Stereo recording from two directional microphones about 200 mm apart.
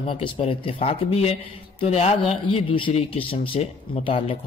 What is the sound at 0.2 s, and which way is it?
A man's voice, 25° left (ahead or behind).